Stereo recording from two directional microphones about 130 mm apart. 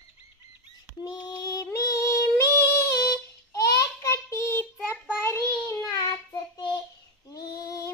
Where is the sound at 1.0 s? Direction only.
30° left (ahead or behind).